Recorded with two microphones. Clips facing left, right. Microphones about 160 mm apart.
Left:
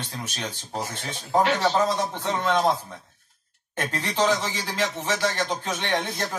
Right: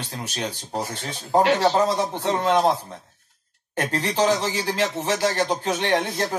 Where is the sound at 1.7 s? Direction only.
30° right (ahead or behind).